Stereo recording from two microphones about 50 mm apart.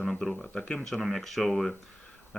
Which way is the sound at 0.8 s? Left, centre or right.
Centre.